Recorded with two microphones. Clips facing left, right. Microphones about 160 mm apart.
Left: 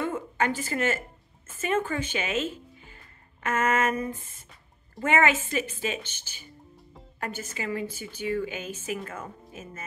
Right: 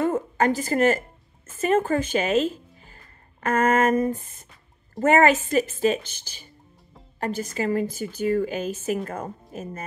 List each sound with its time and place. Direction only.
0.0 s a woman's voice: 40° right (ahead or behind)